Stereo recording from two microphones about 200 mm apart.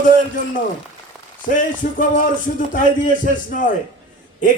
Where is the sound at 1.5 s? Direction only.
40° left (ahead or behind).